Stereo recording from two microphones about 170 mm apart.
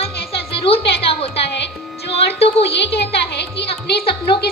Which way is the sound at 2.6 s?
70° left (ahead or behind).